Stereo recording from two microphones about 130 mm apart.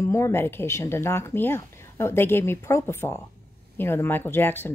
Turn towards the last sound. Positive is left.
turn(degrees=15)  # may be behind; listen again after turning